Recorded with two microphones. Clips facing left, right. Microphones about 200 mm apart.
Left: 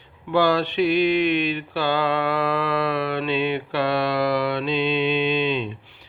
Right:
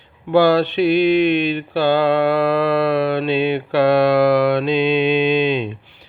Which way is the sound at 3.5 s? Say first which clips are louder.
Right 8 dB; 45° right (ahead or behind).